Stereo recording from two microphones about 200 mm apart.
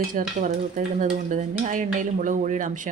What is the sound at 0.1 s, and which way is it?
Stir, 40° right (ahead or behind).